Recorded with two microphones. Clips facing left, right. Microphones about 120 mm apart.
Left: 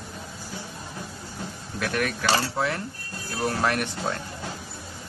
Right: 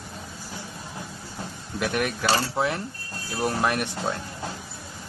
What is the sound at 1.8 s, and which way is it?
Speech, 20° right (ahead or behind).